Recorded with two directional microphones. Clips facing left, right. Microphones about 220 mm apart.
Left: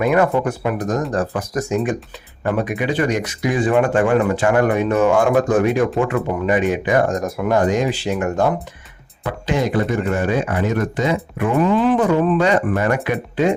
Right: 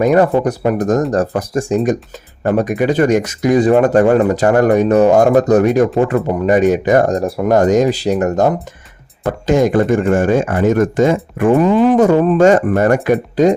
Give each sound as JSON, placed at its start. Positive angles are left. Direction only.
{"t": 0.0, "sound": "speech", "side_deg": -35}